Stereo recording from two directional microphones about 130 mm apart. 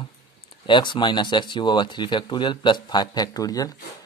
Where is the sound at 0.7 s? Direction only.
35° left (ahead or behind).